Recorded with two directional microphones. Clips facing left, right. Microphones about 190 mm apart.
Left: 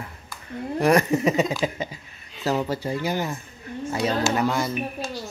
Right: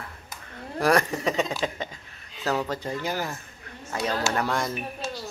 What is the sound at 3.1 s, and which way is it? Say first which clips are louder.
Speech: left 3 dB; 20° left (ahead or behind).